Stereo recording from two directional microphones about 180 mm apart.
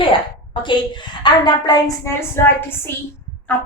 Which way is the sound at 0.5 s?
25° left (ahead or behind).